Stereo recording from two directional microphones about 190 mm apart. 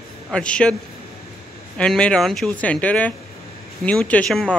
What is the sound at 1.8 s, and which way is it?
Speech, 5° left (ahead or behind).